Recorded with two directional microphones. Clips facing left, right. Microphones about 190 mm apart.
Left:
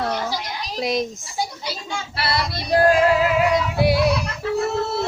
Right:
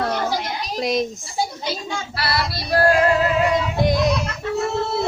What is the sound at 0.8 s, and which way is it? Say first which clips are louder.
Speech: right 1 dB; centre (ahead or behind).